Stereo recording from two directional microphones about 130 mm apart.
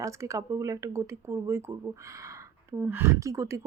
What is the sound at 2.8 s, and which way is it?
Speech, 15° right (ahead or behind).